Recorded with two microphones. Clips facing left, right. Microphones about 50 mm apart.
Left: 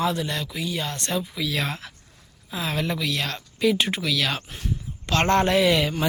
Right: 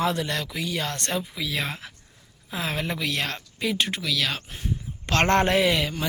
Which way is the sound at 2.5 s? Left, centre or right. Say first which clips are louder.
Left 2 dB; right.